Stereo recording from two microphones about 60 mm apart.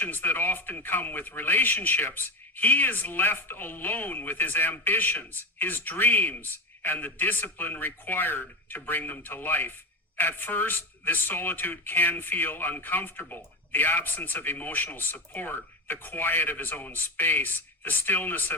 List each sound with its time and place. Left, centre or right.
0.0 s speech: left